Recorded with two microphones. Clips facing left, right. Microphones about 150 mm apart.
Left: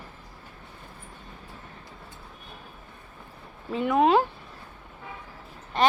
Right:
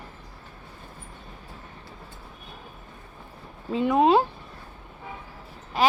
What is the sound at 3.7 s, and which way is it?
Speech, 20° right (ahead or behind).